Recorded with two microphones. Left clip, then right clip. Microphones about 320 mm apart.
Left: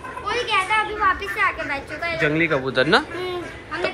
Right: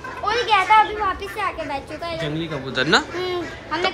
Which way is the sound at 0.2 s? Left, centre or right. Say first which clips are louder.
Right 4 dB; right.